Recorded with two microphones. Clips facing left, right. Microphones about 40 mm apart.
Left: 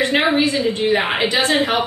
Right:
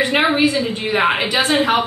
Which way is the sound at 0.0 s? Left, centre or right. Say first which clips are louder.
Right 1 dB; centre.